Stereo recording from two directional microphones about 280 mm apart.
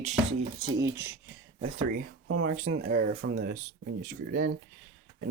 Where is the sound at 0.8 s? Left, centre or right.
Centre.